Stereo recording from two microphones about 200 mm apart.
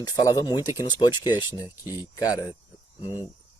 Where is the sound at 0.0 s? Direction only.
15° left (ahead or behind).